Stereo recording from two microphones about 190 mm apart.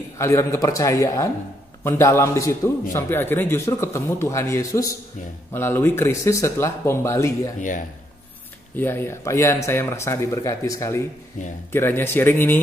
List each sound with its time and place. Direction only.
0.2 s a man's voice: 15° left (ahead or behind)
8.7 s a man's voice: 10° left (ahead or behind)